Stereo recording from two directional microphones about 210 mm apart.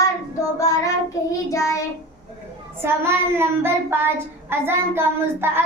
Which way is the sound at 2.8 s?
10° right (ahead or behind).